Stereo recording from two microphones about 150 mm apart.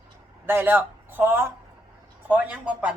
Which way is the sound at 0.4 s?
15° right (ahead or behind).